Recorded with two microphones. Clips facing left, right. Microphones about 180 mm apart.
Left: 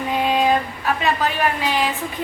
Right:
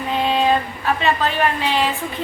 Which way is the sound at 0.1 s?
10° left (ahead or behind).